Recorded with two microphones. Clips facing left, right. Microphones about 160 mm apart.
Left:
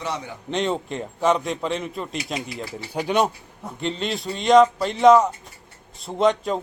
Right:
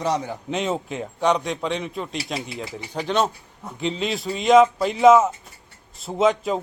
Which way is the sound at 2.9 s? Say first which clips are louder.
Left 1 dB; 10° left (ahead or behind).